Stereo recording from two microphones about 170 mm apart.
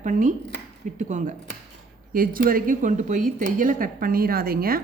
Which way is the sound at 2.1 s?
55° right (ahead or behind).